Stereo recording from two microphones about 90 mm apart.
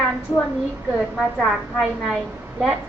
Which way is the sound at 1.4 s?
Centre (ahead or behind).